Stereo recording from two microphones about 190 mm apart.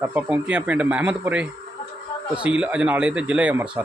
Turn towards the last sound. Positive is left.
turn(degrees=-10)  # may be behind; listen again after turning